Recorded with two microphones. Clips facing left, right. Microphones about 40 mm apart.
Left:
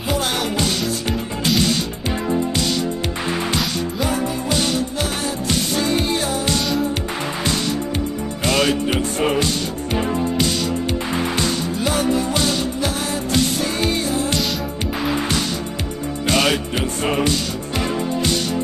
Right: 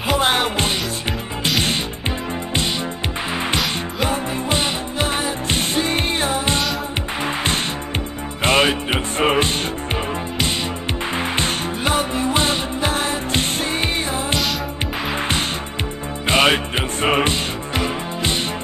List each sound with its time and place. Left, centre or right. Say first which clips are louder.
0.2 s music: right 3 dB; right
3.5 s music: even; right
8.5 s music: right 2 dB; right
11.3 s music: left 1 dB; right